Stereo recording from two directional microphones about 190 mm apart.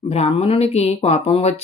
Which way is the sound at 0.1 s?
35° left (ahead or behind).